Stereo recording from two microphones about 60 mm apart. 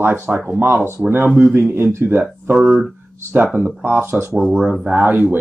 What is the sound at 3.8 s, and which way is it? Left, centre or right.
Speech, right.